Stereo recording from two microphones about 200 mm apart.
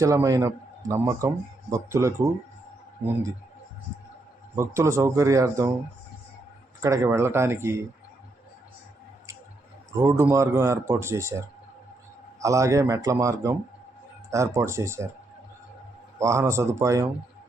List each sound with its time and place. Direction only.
0.0 s speech: 15° right (ahead or behind)
4.5 s speech: 15° right (ahead or behind)
6.8 s speech: 15° right (ahead or behind)
10.0 s speech: 15° right (ahead or behind)
16.1 s speech: 15° right (ahead or behind)